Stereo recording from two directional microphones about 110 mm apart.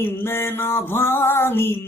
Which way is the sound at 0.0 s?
20° left (ahead or behind).